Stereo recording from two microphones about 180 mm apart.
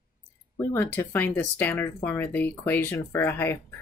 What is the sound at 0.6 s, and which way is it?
Speech, 10° left (ahead or behind).